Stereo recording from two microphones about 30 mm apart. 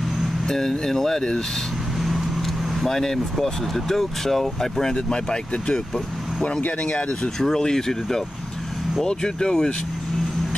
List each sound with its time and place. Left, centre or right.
0.5 s speech: centre
2.0 s vehicle: centre
2.8 s speech: centre
4.9 s speech: left
6.8 s speech: left
7.3 s speech: centre